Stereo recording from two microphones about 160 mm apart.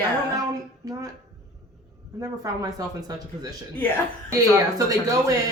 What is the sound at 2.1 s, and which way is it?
Speech, 20° right (ahead or behind).